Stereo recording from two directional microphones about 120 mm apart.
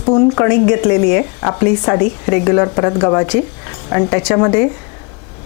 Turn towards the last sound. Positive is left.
turn(degrees=25)  # may be behind; listen again after turning